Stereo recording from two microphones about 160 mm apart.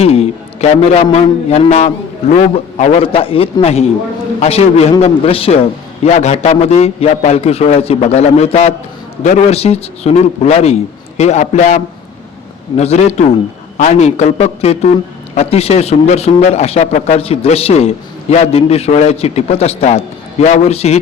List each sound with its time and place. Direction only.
0.0 s a man's voice: 40° left (ahead or behind)